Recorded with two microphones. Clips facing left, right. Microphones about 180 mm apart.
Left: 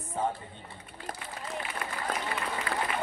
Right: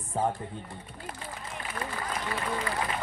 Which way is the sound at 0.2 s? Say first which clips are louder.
Right 2 dB; 35° right (ahead or behind).